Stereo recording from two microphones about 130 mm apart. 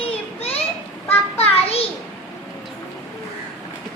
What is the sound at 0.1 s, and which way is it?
Children playing, 50° left (ahead or behind).